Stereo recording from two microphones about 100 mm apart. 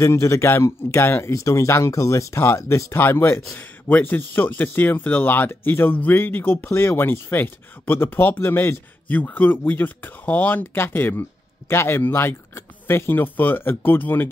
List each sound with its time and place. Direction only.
0.0 s a man's voice: 30° left (ahead or behind)